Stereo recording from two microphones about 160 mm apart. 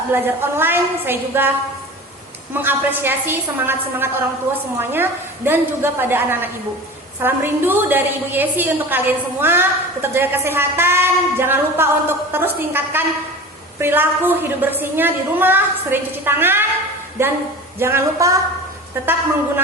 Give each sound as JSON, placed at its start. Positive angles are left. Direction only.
{"t": 0.1, "sound": "a woman's voice", "side_deg": -15}
{"t": 2.5, "sound": "a woman's voice", "side_deg": -15}